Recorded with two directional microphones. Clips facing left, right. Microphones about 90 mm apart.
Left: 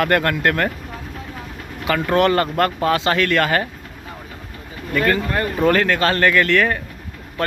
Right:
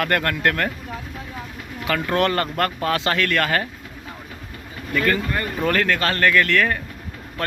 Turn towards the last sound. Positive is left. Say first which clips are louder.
# left 2 dB
turn(degrees=15)  # may be behind; listen again after turning